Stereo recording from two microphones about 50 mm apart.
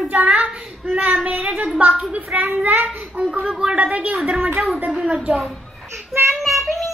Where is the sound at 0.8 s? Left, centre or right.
Right.